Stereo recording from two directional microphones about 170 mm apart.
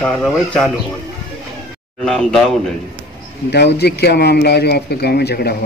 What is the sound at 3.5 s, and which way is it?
Speech, 80° left.